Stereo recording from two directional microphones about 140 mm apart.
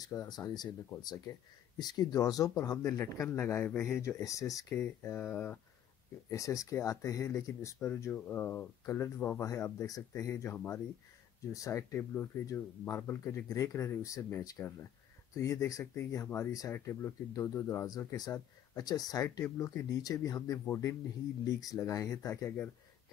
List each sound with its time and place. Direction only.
0.0 s speech: 25° left (ahead or behind)
1.8 s speech: 30° left (ahead or behind); by 5.6 s 10° left (ahead or behind)
6.3 s speech: 25° left (ahead or behind)